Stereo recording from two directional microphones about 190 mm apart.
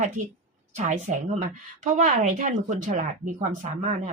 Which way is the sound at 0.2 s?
40° right (ahead or behind).